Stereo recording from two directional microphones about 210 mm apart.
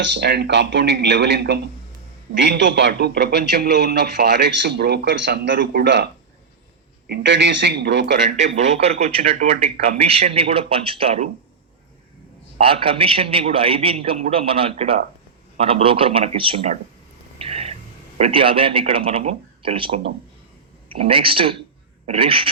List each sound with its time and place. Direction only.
0.0 s a man's voice: 55° right (ahead or behind)
7.1 s speech: 55° right (ahead or behind)
8.4 s a man's voice: 35° right (ahead or behind)
12.5 s a man's voice: 25° right (ahead or behind)
17.3 s a sound: 30° right (ahead or behind)
18.2 s a man's voice: 25° right (ahead or behind)